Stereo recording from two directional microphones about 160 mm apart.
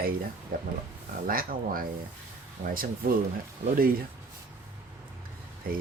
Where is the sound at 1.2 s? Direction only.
65° right (ahead or behind).